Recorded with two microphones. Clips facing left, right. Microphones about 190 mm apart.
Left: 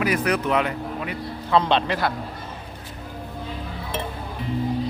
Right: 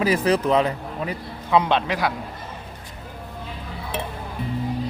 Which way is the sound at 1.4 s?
10° right (ahead or behind).